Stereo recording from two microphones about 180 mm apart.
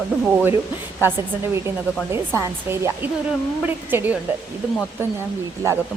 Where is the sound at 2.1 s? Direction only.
15° right (ahead or behind).